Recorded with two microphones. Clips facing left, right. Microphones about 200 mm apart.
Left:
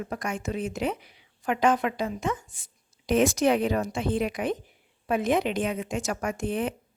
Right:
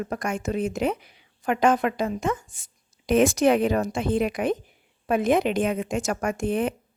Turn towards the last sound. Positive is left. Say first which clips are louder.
# right 4 dB
turn(degrees=-50)  # may be behind; listen again after turning